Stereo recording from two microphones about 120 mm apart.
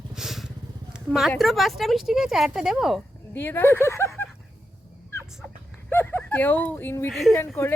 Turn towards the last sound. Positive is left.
turn(degrees=15)  # may be behind; listen again after turning